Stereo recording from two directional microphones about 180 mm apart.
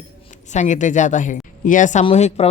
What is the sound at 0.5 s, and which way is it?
Speech, 40° left (ahead or behind).